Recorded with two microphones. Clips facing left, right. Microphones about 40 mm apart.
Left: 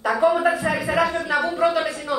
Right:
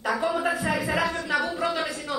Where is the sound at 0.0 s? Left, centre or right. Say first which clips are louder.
Left 7 dB; centre.